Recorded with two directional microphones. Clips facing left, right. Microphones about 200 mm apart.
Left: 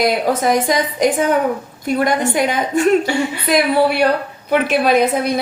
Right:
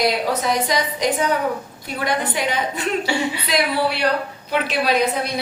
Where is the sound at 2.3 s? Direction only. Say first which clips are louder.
Left 6 dB; 45° left (ahead or behind).